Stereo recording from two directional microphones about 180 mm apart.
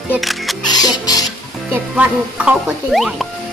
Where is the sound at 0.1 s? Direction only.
Centre (ahead or behind).